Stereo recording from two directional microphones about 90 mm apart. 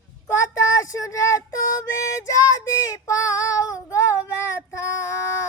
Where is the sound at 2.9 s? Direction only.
40° left (ahead or behind).